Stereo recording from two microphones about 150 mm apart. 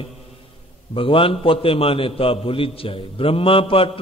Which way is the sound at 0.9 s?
35° left (ahead or behind).